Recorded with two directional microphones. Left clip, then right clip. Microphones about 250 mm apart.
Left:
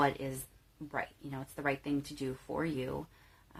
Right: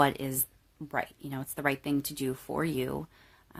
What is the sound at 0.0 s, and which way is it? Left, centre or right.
Speech, right.